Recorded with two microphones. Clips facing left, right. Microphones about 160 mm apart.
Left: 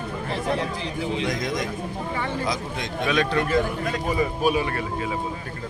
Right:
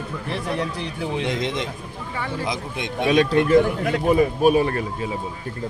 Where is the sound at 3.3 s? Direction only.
20° right (ahead or behind).